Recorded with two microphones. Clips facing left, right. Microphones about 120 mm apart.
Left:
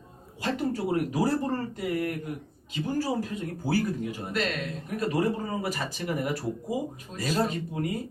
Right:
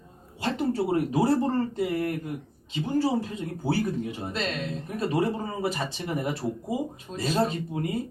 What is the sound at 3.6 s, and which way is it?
Speech, 25° right (ahead or behind).